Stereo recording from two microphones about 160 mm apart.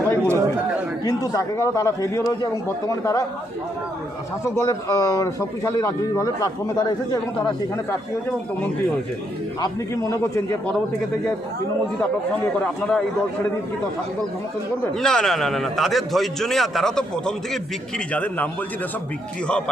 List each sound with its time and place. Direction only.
0.2 s chatter: 15° right (ahead or behind)
1.0 s speech: 20° left (ahead or behind)
4.4 s speech: 20° left (ahead or behind)
9.6 s speech: 20° left (ahead or behind)
12.6 s a man's voice: 5° left (ahead or behind)
14.9 s a man's voice: 5° left (ahead or behind)
19.5 s a man's voice: 5° left (ahead or behind)